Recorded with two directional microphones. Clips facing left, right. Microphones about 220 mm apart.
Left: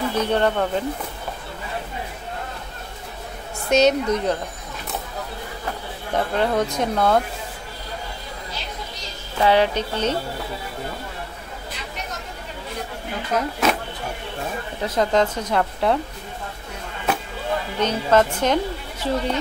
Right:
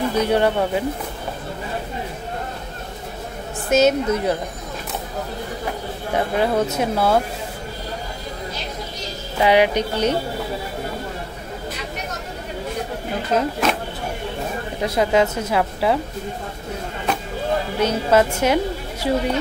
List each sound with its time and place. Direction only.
0.1 s a woman's voice: 10° right (ahead or behind)
3.6 s a woman's voice: 5° right (ahead or behind)
6.1 s a woman's voice: 10° right (ahead or behind)
9.4 s a woman's voice: 15° right (ahead or behind)
13.3 s speech: 25° right (ahead or behind)
14.8 s a woman's voice: 10° right (ahead or behind)
17.7 s a woman's voice: 10° right (ahead or behind)